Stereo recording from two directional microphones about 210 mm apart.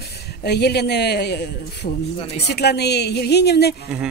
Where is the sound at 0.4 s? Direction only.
50° left (ahead or behind).